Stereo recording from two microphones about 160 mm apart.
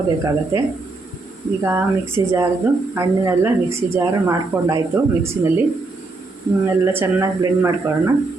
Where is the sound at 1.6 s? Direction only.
15° right (ahead or behind).